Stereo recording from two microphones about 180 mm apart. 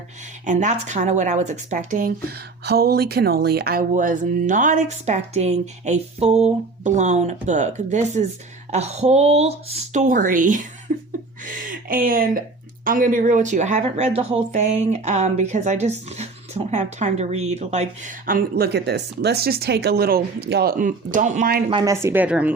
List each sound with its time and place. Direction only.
0.4 s speech: 40° right (ahead or behind)
2.6 s speech: 60° right (ahead or behind)
10.9 s chuckle: 45° right (ahead or behind)
11.4 s a woman's voice: 50° right (ahead or behind)
20.7 s speech: 45° right (ahead or behind)
21.7 s speech: 25° right (ahead or behind)
22.0 s a woman's voice: 10° right (ahead or behind)